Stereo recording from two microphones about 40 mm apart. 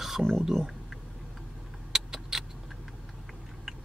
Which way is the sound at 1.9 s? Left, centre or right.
Centre.